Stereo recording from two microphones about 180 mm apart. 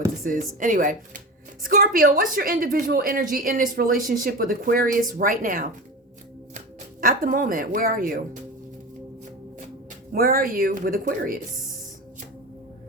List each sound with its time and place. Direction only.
0.6 s a woman's voice: 50° right (ahead or behind)
7.0 s a woman's voice: 50° right (ahead or behind)
10.1 s a woman's voice: 55° right (ahead or behind)